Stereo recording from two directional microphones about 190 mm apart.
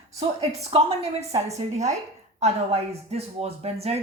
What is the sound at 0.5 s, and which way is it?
A woman's voice, 30° right (ahead or behind).